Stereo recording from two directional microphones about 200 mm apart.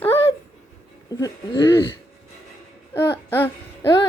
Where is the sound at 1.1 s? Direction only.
20° left (ahead or behind).